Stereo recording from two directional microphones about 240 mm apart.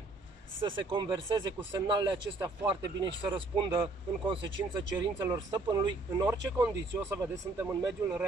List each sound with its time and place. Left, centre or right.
0.7 s speech: centre